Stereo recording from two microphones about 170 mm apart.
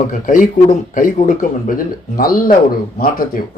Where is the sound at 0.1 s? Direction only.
50° left (ahead or behind).